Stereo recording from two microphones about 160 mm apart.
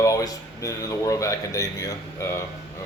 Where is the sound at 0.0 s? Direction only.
20° left (ahead or behind).